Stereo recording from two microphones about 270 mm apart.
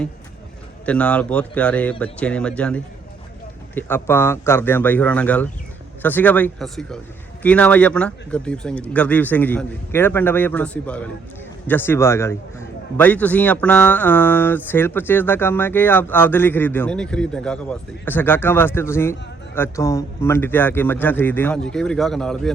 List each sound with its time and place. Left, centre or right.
0.9 s a man's voice: centre